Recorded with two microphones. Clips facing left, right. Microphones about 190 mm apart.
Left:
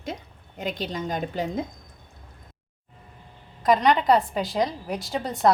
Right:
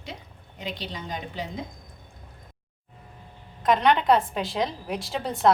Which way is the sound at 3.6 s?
Centre (ahead or behind).